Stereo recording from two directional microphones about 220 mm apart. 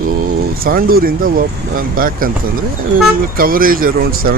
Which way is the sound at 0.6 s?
40° right (ahead or behind).